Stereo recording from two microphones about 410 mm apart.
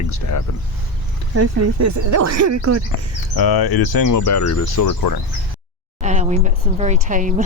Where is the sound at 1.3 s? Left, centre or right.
Right.